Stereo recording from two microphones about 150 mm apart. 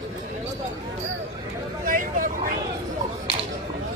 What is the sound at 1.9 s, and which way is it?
Vehicle, 60° right (ahead or behind).